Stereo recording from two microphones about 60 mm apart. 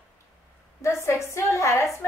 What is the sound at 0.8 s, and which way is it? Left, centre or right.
A woman's voice, left.